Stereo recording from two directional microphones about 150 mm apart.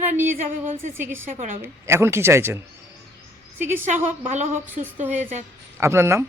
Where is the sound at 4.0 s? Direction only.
55° right (ahead or behind).